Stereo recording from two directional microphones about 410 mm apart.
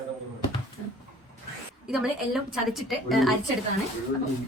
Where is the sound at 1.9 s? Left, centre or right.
Centre.